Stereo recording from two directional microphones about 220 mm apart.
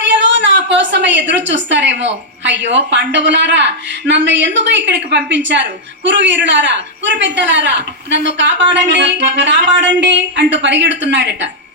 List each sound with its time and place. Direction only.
0.1 s a woman's voice: 55° right (ahead or behind)